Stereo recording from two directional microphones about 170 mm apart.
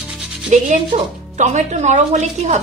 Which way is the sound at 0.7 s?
45° right (ahead or behind).